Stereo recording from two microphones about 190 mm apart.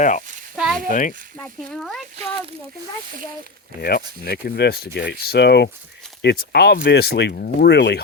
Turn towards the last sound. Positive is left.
turn(degrees=65)  # may be behind; listen again after turning